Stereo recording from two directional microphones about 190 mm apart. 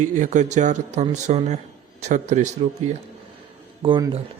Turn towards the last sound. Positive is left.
turn(degrees=-25)  # may be behind; listen again after turning